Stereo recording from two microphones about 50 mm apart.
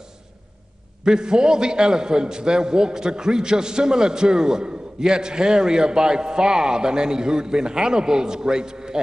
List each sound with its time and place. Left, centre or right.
1.0 s a man's voice: centre